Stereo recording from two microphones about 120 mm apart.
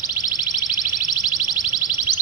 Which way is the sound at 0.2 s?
30° left (ahead or behind).